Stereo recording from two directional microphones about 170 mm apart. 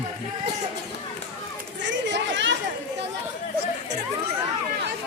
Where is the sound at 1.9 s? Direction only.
90° right.